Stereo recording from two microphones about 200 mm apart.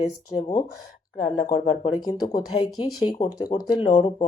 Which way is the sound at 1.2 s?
35° left (ahead or behind).